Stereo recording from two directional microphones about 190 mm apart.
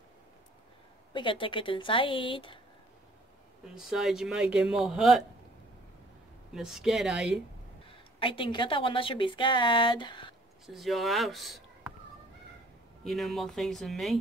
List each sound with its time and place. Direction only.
1.1 s a woman's voice: 25° left (ahead or behind)
3.7 s speech: centre (ahead or behind)
6.5 s speech: centre (ahead or behind)
7.9 s a woman's voice: 25° left (ahead or behind)
10.7 s speech: centre (ahead or behind)
13.0 s speech: centre (ahead or behind)